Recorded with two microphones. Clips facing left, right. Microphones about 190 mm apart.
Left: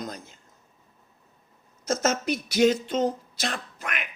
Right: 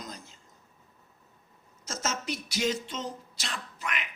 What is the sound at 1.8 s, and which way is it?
Speech, 55° left (ahead or behind).